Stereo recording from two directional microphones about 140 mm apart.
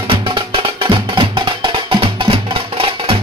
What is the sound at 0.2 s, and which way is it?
Music, 35° right (ahead or behind).